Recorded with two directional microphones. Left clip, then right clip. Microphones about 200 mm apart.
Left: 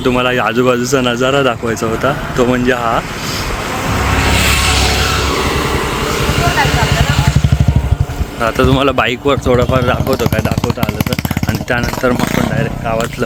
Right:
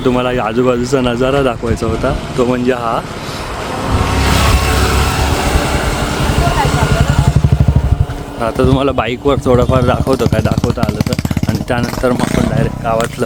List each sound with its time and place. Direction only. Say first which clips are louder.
0.0 s speech: left 1 dB; 10° right (ahead or behind)
4.2 s vehicle: left 1 dB; 25° right (ahead or behind)
4.5 s music: left 2 dB; 45° right (ahead or behind)
8.4 s speech: left 1 dB; centre (ahead or behind)
10.8 s a sound: even; 35° left (ahead or behind)
11.7 s speech: left 1 dB; 15° right (ahead or behind)